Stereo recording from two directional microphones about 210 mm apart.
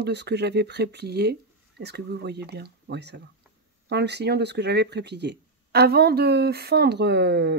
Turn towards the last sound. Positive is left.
turn(degrees=-50)  # may be behind; listen again after turning